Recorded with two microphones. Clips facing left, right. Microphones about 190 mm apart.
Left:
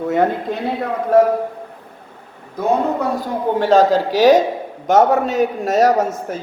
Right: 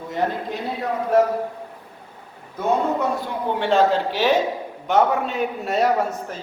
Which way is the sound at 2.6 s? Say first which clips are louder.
Left 3 dB; 40° left (ahead or behind).